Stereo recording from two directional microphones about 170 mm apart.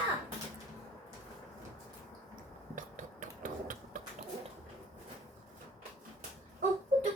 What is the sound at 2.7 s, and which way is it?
Hammer, 50° right (ahead or behind).